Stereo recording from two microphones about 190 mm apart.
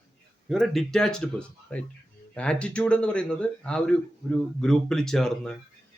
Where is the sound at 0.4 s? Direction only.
Centre (ahead or behind).